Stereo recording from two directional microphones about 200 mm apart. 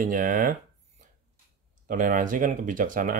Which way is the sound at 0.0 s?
45° right (ahead or behind).